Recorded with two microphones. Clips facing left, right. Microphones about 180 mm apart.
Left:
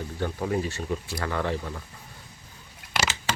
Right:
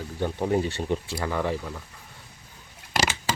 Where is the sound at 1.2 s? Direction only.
10° right (ahead or behind).